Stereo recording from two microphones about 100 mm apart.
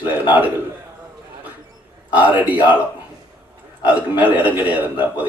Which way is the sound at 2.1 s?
15° right (ahead or behind).